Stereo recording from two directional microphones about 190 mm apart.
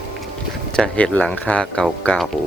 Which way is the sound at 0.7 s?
5° left (ahead or behind).